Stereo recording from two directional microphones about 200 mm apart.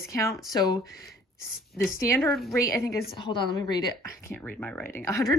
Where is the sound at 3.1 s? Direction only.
25° left (ahead or behind).